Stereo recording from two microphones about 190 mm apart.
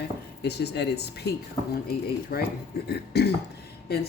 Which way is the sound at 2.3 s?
50° left (ahead or behind).